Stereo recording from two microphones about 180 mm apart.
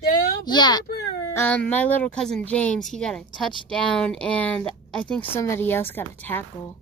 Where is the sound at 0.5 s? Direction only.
25° left (ahead or behind).